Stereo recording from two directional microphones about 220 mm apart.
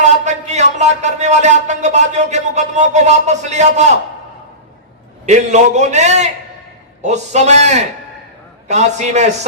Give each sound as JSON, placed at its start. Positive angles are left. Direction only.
{"t": 0.0, "sound": "a man's voice", "side_deg": -30}
{"t": 5.2, "sound": "a man's voice", "side_deg": -30}